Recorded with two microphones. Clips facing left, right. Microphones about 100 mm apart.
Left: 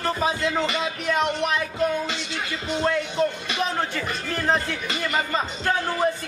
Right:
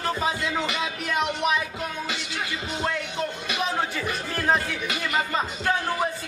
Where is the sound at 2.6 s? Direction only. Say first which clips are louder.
Left 7 dB; 10° right (ahead or behind).